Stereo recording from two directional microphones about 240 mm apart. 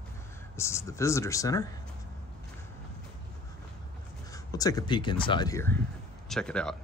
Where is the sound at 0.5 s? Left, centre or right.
Centre.